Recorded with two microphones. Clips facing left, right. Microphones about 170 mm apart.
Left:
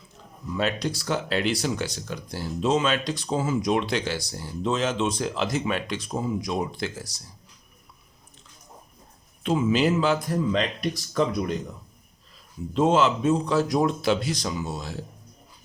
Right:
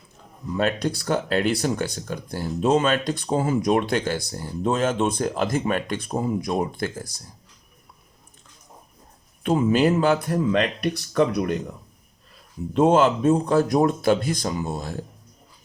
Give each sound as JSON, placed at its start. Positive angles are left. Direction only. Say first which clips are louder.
{"t": 0.5, "sound": "speech", "louder": "right 3 dB", "side_deg": -50}
{"t": 9.4, "sound": "speech", "louder": "right 3 dB", "side_deg": -55}
{"t": 12.7, "sound": "speech", "louder": "right 3 dB", "side_deg": -55}